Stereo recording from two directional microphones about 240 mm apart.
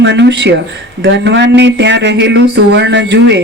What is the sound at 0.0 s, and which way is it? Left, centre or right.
Speech, right.